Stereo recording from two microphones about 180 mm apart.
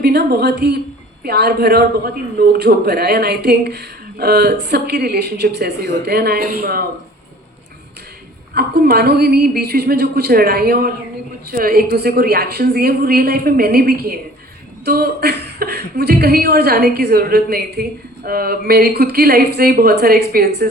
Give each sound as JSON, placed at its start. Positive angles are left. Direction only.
{"t": 0.0, "sound": "a woman's voice", "side_deg": -65}
{"t": 8.5, "sound": "a man's voice", "side_deg": -60}